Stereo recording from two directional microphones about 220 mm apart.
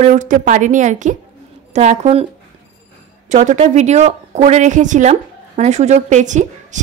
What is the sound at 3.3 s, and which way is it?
A woman's voice, 30° right (ahead or behind).